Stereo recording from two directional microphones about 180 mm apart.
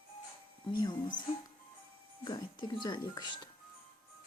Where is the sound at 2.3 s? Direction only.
25° left (ahead or behind).